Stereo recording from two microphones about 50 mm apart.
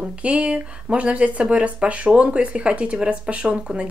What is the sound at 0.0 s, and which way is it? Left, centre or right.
Speech, right.